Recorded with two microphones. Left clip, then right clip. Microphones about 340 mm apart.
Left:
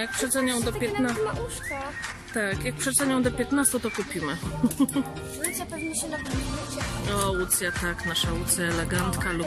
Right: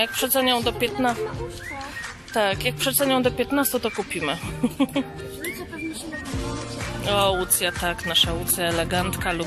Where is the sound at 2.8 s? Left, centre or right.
Centre.